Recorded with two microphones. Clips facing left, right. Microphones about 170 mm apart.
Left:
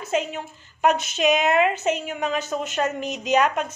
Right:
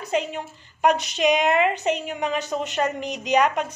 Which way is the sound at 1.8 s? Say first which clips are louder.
Even; 15° right (ahead or behind).